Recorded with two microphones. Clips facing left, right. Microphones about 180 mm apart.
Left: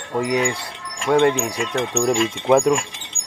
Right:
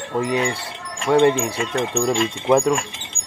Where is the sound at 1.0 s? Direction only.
5° right (ahead or behind).